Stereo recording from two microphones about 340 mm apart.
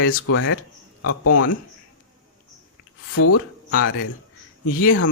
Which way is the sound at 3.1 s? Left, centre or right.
Left.